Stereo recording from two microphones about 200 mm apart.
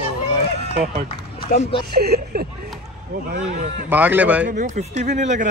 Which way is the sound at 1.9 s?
50° right (ahead or behind).